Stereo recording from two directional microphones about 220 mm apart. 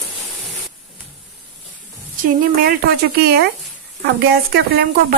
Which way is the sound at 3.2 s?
45° right (ahead or behind).